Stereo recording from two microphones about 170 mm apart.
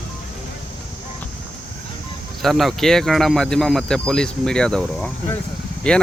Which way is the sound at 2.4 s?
Centre (ahead or behind).